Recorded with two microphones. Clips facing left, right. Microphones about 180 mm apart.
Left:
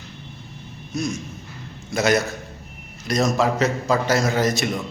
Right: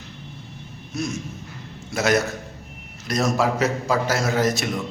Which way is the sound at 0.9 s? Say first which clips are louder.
Left 1 dB; 5° right (ahead or behind).